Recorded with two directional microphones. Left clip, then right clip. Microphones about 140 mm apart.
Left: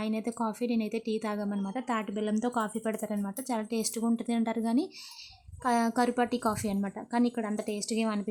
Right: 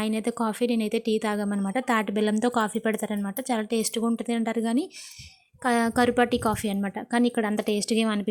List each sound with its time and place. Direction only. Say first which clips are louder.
0.0 s a woman's voice: right 5 dB; 20° right (ahead or behind)